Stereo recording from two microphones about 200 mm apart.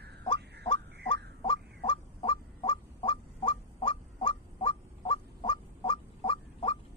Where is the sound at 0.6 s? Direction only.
25° left (ahead or behind).